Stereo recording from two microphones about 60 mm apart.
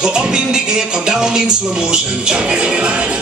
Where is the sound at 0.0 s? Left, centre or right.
Centre.